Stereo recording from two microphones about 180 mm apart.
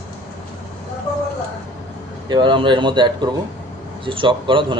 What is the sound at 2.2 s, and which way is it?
Speech, 25° right (ahead or behind).